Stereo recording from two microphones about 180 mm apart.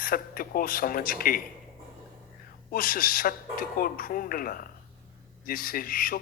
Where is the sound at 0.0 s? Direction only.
55° left (ahead or behind).